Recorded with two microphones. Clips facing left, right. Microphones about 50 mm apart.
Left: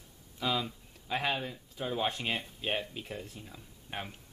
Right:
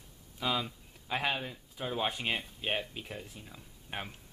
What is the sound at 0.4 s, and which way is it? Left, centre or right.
Speech, centre.